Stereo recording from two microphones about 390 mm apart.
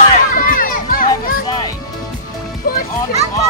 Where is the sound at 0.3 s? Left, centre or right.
Left.